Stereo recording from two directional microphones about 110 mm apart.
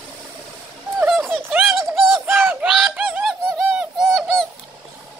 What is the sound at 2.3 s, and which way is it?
Bird, 15° right (ahead or behind).